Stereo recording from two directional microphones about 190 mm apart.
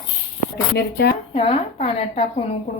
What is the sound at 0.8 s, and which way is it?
Speech, 55° left (ahead or behind).